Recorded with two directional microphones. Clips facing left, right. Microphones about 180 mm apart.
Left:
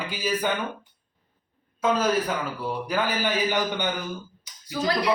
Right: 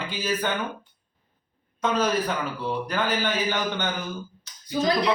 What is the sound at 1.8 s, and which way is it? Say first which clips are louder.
A man's voice: left 1 dB; 5° left (ahead or behind).